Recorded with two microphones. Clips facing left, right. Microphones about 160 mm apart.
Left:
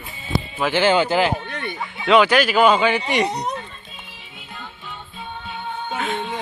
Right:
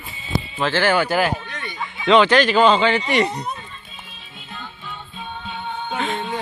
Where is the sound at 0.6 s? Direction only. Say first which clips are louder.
Left 1 dB; 15° left (ahead or behind).